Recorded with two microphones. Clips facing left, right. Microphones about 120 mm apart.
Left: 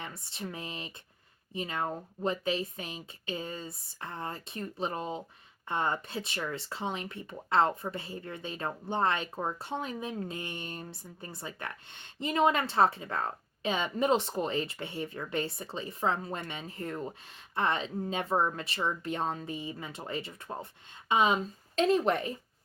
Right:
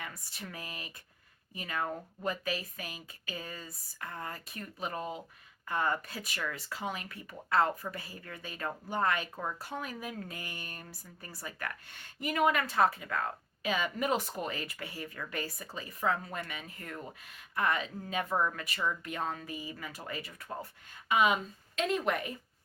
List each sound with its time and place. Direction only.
0.0 s speech: 25° left (ahead or behind)